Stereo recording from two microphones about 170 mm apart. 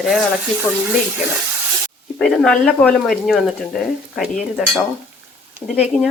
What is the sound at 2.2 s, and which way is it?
Speech, 5° left (ahead or behind).